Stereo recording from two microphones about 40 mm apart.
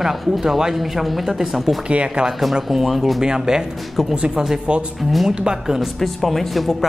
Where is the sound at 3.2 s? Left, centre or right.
Centre.